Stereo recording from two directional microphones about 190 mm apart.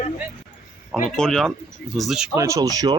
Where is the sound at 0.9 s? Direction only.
5° left (ahead or behind).